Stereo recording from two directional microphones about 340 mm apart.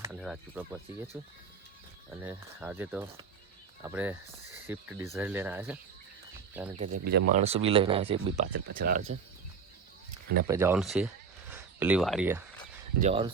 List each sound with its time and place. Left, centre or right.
0.0 s speech: centre
6.7 s speech: centre
10.4 s speech: centre
13.0 s speech: centre